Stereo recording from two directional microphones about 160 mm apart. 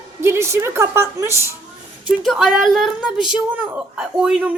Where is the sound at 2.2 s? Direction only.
Centre (ahead or behind).